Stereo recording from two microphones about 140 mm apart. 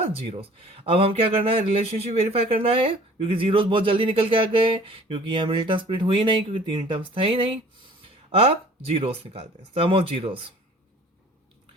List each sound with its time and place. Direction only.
0.9 s speech: 40° right (ahead or behind)